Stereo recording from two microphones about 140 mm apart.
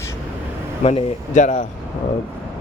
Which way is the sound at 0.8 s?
55° left (ahead or behind).